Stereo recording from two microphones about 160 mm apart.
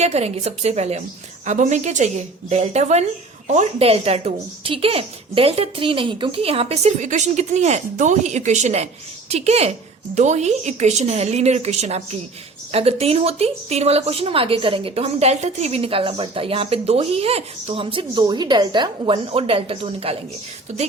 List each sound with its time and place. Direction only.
0.0 s a woman's voice: 40° right (ahead or behind)